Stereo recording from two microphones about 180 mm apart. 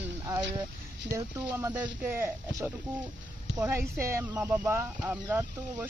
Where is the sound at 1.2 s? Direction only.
15° right (ahead or behind).